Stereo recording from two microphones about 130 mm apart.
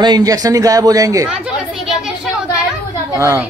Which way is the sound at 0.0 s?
30° right (ahead or behind).